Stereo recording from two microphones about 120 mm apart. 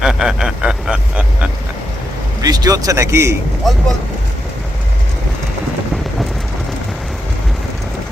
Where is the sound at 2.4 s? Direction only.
30° right (ahead or behind).